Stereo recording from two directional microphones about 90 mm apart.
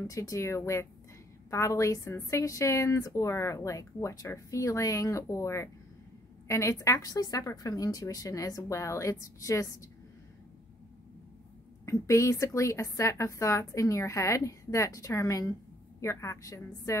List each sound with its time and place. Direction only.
0.0 s a woman's voice: 35° left (ahead or behind)
11.8 s a woman's voice: 35° left (ahead or behind)